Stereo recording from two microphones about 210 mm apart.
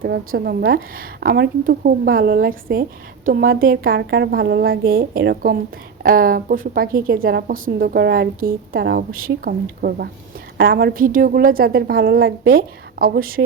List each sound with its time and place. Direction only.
0.3 s a woman's voice: 45° right (ahead or behind)